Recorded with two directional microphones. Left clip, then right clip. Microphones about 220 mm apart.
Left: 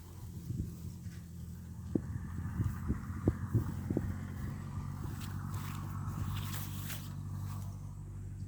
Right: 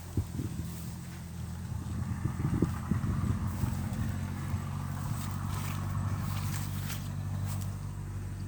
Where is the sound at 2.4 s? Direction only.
40° right (ahead or behind).